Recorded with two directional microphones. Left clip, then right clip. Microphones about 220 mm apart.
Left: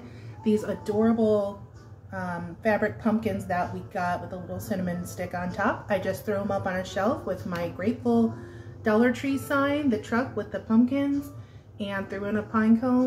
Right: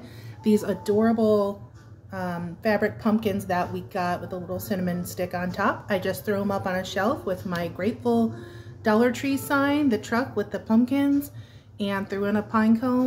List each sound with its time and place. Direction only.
0.4 s a woman's voice: 45° right (ahead or behind)